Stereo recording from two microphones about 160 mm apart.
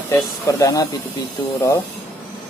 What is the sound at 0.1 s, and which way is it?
Speech, 20° left (ahead or behind).